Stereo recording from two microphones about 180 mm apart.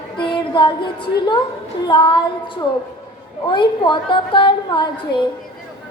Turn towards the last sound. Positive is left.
turn(degrees=25)  # may be behind; listen again after turning